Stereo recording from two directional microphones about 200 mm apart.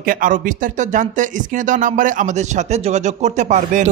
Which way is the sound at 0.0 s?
45° right (ahead or behind).